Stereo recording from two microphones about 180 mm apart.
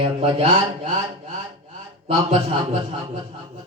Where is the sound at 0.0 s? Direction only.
30° right (ahead or behind).